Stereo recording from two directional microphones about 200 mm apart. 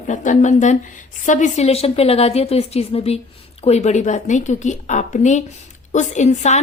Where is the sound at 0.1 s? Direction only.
40° left (ahead or behind).